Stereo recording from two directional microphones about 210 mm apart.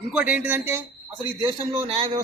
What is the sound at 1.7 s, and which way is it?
Speech, 25° right (ahead or behind).